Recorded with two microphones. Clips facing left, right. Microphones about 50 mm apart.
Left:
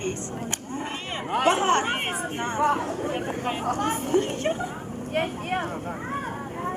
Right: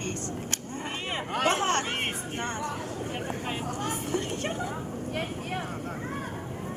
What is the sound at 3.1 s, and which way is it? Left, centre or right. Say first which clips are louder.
Speech: left 5 dB; centre.